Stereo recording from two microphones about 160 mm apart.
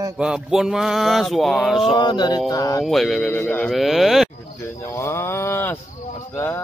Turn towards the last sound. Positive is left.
turn(degrees=15)  # may be behind; listen again after turning